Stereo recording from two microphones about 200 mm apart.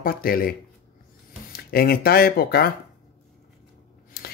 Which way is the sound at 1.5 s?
50° left (ahead or behind).